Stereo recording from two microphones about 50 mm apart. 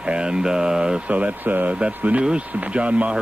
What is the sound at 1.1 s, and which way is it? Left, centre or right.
Speech, right.